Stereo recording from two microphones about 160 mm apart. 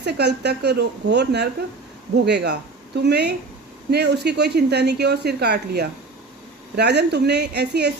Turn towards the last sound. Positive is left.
turn(degrees=-90)